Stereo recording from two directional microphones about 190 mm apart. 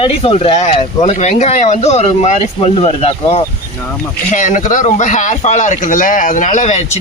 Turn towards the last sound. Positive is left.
turn(degrees=35)  # may be behind; listen again after turning